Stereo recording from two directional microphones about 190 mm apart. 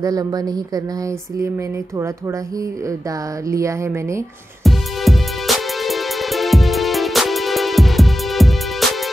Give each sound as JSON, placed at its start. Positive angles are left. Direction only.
{"t": 0.0, "sound": "speech", "side_deg": -20}
{"t": 3.4, "sound": "a sound", "side_deg": -15}
{"t": 4.6, "sound": "music", "side_deg": 0}